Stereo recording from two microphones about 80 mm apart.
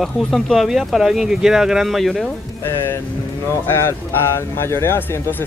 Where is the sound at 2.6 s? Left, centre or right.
Left.